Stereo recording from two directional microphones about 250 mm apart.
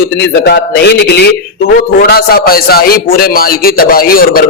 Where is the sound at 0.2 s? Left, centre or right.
Left.